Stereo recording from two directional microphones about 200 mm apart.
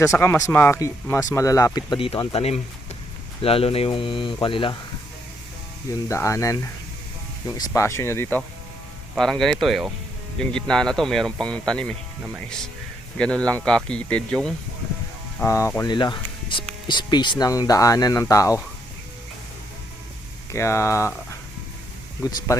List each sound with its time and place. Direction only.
0.2 s speech: 15° left (ahead or behind)
6.1 s speech: 15° left (ahead or behind)
9.1 s speech: centre (ahead or behind)
13.1 s speech: 5° left (ahead or behind)
20.5 s speech: 15° left (ahead or behind)